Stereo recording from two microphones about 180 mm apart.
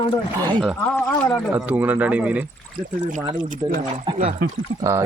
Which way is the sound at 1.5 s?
10° right (ahead or behind).